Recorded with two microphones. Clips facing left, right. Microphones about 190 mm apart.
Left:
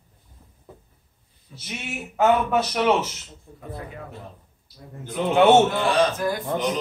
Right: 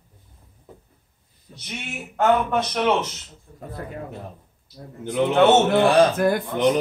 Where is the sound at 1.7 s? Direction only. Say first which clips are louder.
Left 1 dB; 5° left (ahead or behind).